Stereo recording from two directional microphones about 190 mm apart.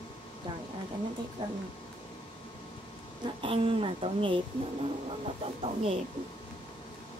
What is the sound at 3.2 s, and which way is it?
Speech, 30° right (ahead or behind).